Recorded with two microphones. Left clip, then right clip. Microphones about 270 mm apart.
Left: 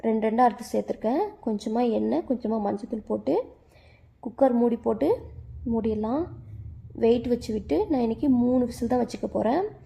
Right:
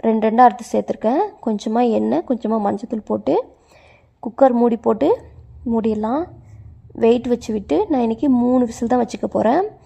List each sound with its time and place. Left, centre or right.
0.0 s a woman's voice: right